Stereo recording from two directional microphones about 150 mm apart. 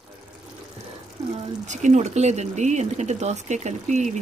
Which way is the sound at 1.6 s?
50° right (ahead or behind).